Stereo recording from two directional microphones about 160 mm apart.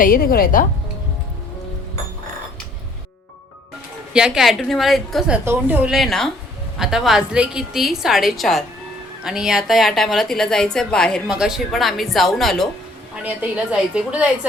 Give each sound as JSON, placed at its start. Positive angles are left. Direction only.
{"t": 0.0, "sound": "a woman's voice", "side_deg": 65}
{"t": 4.1, "sound": "a woman's voice", "side_deg": -5}
{"t": 5.5, "sound": "a woman's voice", "side_deg": -10}